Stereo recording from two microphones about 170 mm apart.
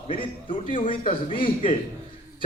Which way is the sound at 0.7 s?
30° left (ahead or behind).